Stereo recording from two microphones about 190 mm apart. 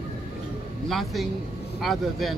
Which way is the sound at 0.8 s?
Centre (ahead or behind).